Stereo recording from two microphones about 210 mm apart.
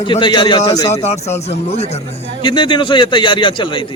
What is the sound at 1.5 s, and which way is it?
A man's voice, 30° left (ahead or behind).